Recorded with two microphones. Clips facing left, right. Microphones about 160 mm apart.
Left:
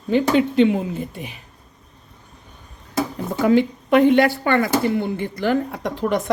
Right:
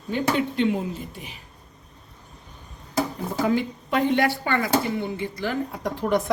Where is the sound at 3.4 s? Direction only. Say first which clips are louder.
Left 7 dB; 70° left (ahead or behind).